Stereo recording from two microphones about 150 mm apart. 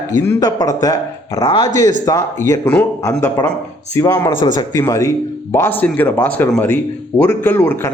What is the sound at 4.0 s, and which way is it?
A man's voice, 20° left (ahead or behind).